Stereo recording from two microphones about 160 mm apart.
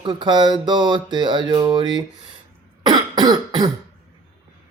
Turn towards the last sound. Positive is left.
turn(degrees=-25)  # may be behind; listen again after turning